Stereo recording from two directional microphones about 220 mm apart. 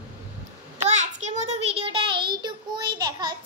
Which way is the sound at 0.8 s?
30° right (ahead or behind).